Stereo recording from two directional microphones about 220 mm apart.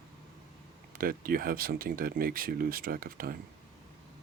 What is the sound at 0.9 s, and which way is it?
Speech, 40° right (ahead or behind).